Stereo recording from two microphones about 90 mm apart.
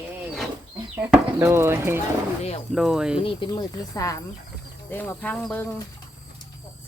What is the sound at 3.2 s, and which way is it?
Speech, 70° left (ahead or behind).